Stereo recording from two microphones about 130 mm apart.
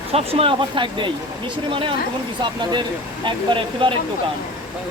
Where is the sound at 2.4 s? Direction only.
35° right (ahead or behind).